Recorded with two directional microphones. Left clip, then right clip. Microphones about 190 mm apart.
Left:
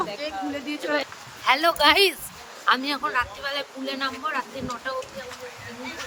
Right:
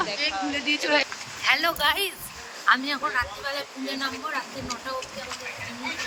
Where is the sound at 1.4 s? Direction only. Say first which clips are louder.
Left 3 dB; 55° left (ahead or behind).